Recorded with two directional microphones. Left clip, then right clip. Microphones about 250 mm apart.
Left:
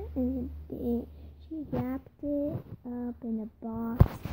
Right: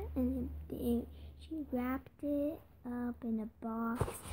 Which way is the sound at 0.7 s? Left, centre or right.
Centre.